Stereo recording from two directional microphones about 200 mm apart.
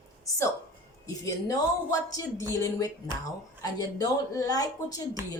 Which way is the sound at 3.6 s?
20° left (ahead or behind).